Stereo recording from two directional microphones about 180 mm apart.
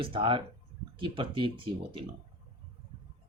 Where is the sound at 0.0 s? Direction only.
30° right (ahead or behind).